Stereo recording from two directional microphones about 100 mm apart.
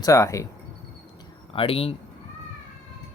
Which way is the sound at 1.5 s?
70° left (ahead or behind).